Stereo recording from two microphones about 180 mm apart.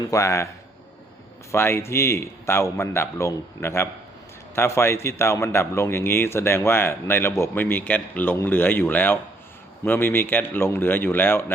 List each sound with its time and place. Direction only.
0.1 s a man's voice: 15° left (ahead or behind)
1.5 s a man's voice: 15° left (ahead or behind)